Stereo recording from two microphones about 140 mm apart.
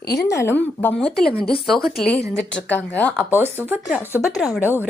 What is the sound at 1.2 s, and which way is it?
Speech, 90° left.